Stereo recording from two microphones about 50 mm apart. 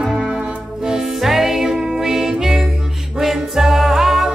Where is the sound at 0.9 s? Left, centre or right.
Centre.